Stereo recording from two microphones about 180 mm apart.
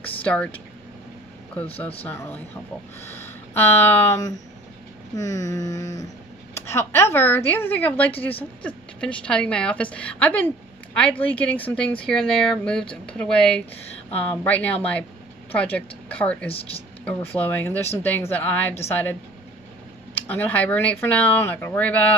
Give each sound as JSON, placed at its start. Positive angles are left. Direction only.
{"t": 0.2, "sound": "speech", "side_deg": 5}
{"t": 2.0, "sound": "a woman's voice", "side_deg": 10}
{"t": 20.2, "sound": "speech", "side_deg": 10}